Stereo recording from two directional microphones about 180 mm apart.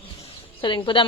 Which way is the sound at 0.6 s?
25° left (ahead or behind).